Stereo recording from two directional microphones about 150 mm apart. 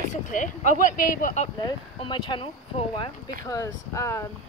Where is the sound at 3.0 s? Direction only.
20° left (ahead or behind).